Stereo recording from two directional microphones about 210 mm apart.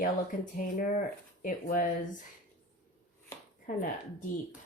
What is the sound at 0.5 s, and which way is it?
A woman's voice, 40° left (ahead or behind).